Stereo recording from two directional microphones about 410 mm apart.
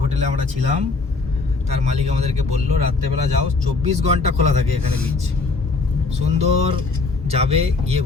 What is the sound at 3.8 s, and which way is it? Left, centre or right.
Speech, centre.